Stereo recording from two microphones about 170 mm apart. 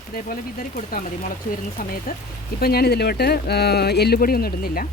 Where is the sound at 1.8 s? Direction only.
55° left (ahead or behind).